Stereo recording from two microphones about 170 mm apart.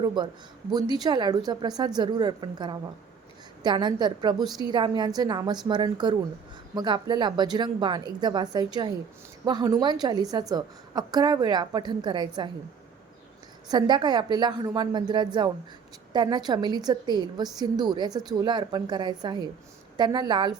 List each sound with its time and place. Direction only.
0.0 s a woman's voice: 25° right (ahead or behind)
13.7 s a woman's voice: 25° right (ahead or behind)